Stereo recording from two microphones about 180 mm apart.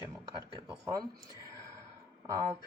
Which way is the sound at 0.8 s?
20° right (ahead or behind).